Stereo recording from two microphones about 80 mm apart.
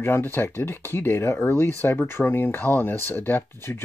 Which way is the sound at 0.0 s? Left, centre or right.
Left.